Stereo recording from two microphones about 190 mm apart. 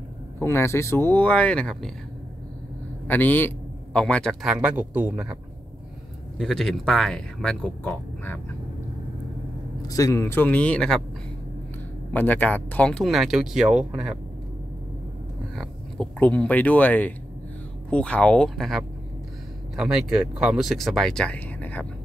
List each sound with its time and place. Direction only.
0.4 s speech: 15° left (ahead or behind)
3.1 s a man's voice: 10° left (ahead or behind)
9.8 s speech: 20° left (ahead or behind)
12.1 s a man's voice: 10° left (ahead or behind)
15.5 s a man's voice: 5° left (ahead or behind)